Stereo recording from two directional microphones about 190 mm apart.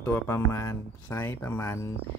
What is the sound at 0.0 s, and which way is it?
Speech, 10° left (ahead or behind).